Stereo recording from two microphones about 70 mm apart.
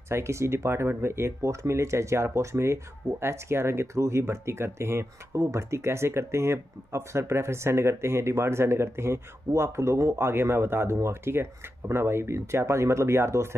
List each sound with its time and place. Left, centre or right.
0.1 s speech: right